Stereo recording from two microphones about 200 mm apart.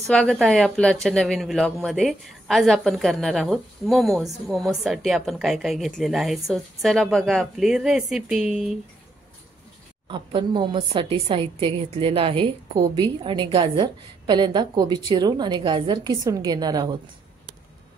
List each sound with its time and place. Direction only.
0.1 s a woman's voice: 5° left (ahead or behind)
10.0 s a woman's voice: 25° right (ahead or behind)